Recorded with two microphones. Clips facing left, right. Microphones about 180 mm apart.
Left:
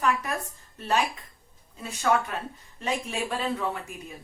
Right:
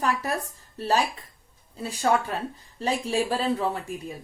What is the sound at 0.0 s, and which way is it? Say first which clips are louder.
Speech: right 1 dB; 35° right (ahead or behind).